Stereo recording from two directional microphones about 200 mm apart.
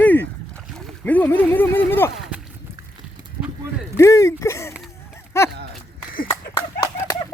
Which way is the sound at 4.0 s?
15° left (ahead or behind).